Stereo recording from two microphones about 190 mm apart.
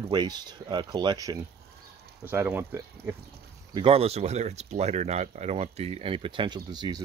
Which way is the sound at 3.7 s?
30° right (ahead or behind).